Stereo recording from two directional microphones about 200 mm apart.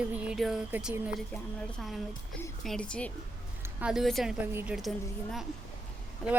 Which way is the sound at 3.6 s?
5° right (ahead or behind).